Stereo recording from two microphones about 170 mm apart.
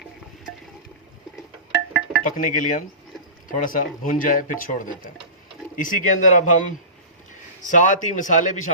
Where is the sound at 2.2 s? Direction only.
50° left (ahead or behind).